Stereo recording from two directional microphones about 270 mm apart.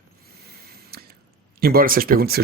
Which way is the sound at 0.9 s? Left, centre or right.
Right.